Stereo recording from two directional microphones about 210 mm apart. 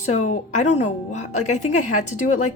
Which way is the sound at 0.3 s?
35° left (ahead or behind).